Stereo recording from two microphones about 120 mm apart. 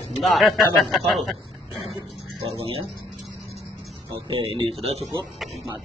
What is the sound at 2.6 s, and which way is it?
Speech, 50° right (ahead or behind).